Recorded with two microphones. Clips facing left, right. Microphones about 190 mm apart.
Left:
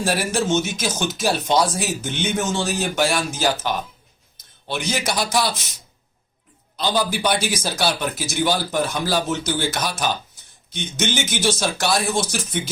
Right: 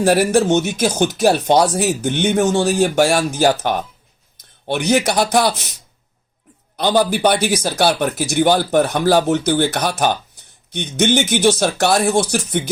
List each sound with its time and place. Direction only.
0.0 s speech: 60° right (ahead or behind)
6.7 s speech: 60° right (ahead or behind)